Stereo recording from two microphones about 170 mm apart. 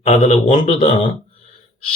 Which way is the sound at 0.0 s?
35° left (ahead or behind).